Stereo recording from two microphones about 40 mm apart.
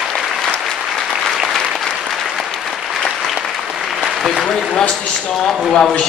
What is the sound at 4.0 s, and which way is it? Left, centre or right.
Applause, centre.